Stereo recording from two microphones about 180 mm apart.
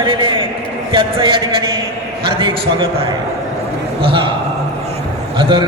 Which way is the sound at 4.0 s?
30° right (ahead or behind).